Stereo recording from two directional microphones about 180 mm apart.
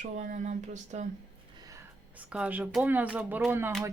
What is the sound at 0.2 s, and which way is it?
Speech, 45° right (ahead or behind).